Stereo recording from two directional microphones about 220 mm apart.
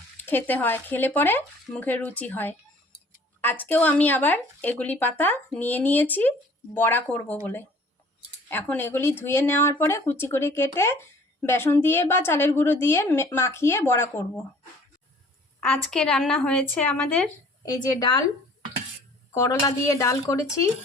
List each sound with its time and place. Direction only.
0.3 s speech: 10° left (ahead or behind)
15.6 s a woman's voice: 5° left (ahead or behind)
17.7 s speech: 20° left (ahead or behind)
19.3 s speech: 15° left (ahead or behind)